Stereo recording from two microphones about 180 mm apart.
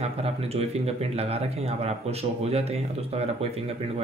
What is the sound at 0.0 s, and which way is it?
Speech, 35° right (ahead or behind).